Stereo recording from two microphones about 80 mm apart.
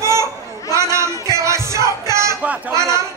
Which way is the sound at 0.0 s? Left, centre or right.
Right.